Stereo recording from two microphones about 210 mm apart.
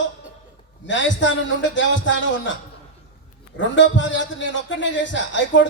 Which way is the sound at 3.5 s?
60° left (ahead or behind).